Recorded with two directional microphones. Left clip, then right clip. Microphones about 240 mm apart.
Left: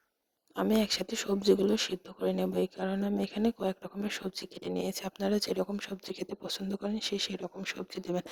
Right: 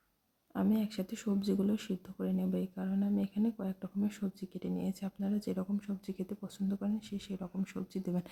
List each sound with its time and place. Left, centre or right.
0.5 s speech: left